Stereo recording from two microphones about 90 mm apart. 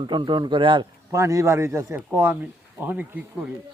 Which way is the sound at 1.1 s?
35° right (ahead or behind).